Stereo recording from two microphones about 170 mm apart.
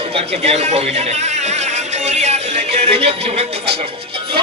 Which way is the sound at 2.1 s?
40° right (ahead or behind).